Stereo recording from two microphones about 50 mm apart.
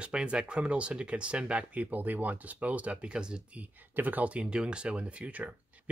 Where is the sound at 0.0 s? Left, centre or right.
Right.